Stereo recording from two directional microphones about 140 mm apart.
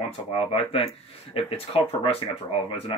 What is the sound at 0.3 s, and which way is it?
Speech, 40° left (ahead or behind).